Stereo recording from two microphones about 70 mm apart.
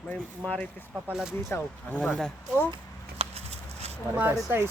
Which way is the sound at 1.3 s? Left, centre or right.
Left.